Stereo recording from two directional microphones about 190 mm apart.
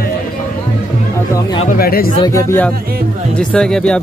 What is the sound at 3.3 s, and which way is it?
Speech, 5° left (ahead or behind).